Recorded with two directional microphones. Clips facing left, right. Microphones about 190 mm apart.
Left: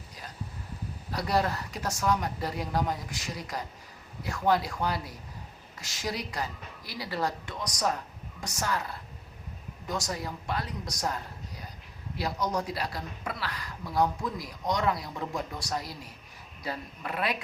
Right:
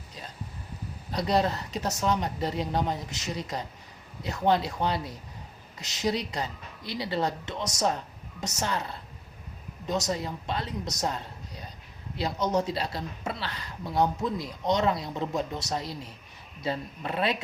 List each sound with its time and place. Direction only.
1.1 s speech: 20° right (ahead or behind)